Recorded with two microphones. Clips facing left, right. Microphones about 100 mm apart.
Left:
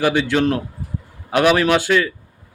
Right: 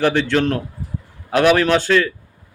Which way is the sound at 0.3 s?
15° left (ahead or behind).